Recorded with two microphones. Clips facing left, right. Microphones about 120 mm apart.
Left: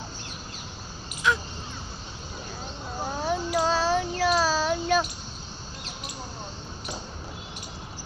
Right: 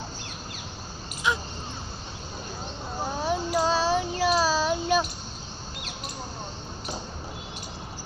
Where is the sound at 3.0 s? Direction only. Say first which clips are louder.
Even; 15° right (ahead or behind).